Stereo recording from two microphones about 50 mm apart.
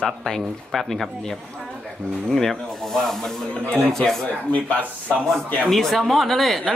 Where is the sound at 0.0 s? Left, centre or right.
Centre.